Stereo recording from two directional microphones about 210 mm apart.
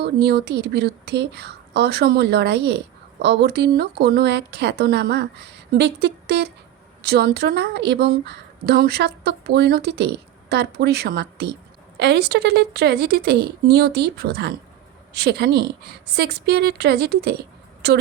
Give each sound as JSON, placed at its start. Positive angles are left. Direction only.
{"t": 0.0, "sound": "a woman's voice", "side_deg": -50}